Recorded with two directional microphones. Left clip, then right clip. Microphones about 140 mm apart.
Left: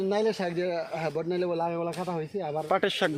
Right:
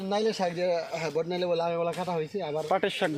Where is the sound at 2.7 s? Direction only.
35° left (ahead or behind).